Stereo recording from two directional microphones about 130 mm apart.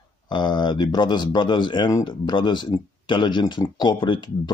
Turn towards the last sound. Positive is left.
turn(degrees=35)  # may be behind; listen again after turning